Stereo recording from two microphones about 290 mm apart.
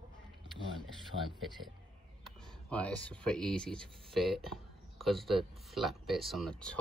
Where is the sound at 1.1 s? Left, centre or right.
Right.